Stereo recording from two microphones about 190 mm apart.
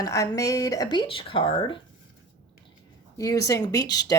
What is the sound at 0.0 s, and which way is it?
Speech, 20° left (ahead or behind).